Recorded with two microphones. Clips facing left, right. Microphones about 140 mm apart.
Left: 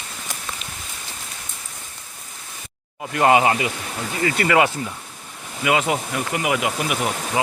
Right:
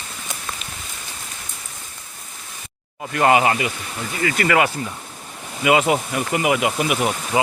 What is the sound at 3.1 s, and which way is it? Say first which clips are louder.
Speech: even; 20° left (ahead or behind).